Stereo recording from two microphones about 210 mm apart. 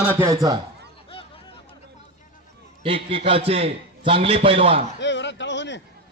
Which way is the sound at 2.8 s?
25° right (ahead or behind).